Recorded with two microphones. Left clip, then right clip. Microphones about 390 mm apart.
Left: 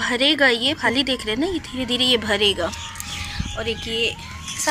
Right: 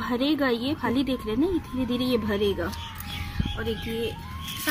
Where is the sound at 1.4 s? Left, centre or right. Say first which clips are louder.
Left 2 dB; centre.